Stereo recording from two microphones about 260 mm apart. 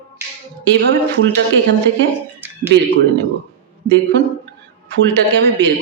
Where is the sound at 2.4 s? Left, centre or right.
Centre.